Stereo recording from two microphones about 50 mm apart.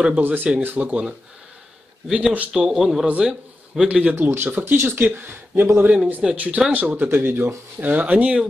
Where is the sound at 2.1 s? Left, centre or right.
Right.